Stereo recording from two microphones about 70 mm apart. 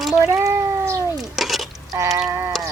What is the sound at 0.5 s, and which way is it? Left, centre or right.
Cat, right.